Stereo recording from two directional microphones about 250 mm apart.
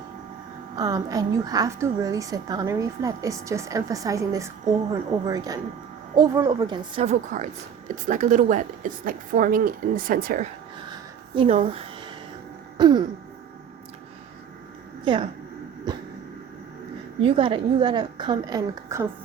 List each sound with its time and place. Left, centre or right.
0.8 s a woman's voice: centre
12.7 s throat clearing: centre
15.0 s a woman's voice: centre
17.2 s a woman's voice: right